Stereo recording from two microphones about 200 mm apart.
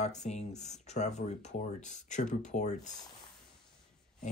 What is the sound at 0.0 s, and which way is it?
Speech, 35° left (ahead or behind).